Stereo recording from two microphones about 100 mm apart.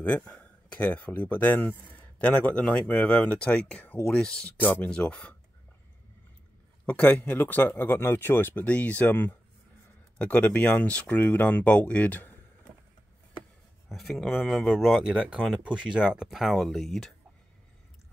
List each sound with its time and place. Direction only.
0.0 s speech: 15° left (ahead or behind)
4.6 s speech: 20° left (ahead or behind)
6.9 s speech: 15° left (ahead or behind)
13.8 s speech: centre (ahead or behind)